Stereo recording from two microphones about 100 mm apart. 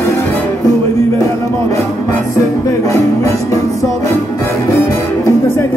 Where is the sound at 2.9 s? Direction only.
30° left (ahead or behind).